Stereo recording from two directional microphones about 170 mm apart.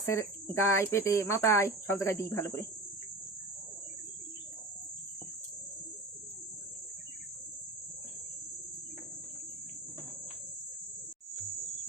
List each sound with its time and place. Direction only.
0.0 s speech: 15° left (ahead or behind)